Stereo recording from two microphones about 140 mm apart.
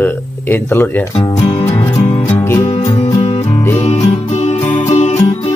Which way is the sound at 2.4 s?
20° left (ahead or behind).